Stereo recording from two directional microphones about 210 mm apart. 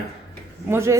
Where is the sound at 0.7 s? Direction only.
10° right (ahead or behind).